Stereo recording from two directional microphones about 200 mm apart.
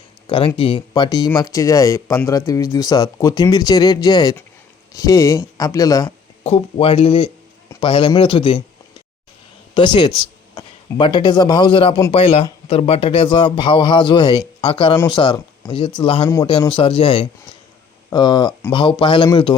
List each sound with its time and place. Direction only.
0.3 s speech: 25° left (ahead or behind)
6.4 s speech: 30° left (ahead or behind)
9.7 s a man's voice: 25° left (ahead or behind)